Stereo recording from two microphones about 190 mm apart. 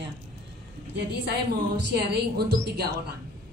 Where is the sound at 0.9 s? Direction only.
60° right (ahead or behind).